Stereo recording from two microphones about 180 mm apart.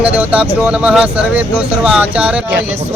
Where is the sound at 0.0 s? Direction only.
10° right (ahead or behind).